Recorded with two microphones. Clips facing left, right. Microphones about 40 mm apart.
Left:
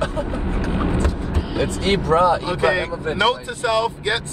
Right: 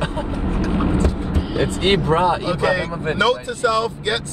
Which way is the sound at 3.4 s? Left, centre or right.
Left.